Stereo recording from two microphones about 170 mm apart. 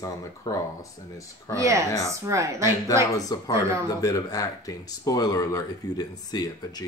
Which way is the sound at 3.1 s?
20° left (ahead or behind).